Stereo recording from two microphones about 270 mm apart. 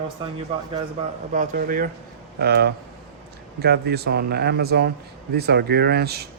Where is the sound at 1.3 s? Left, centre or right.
Right.